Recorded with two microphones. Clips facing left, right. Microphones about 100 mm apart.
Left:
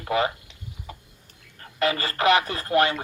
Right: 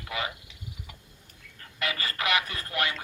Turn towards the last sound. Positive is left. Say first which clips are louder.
# left 10 dB
turn(degrees=35)  # may be behind; listen again after turning